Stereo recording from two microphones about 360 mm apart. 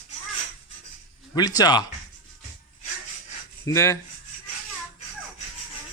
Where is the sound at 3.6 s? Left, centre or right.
Centre.